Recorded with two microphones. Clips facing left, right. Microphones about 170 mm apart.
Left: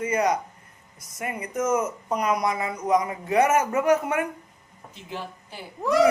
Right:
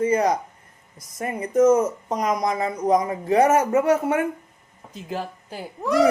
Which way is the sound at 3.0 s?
30° right (ahead or behind).